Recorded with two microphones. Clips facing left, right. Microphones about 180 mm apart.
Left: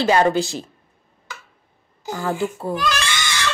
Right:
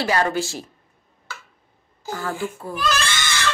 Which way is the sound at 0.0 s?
25° left (ahead or behind).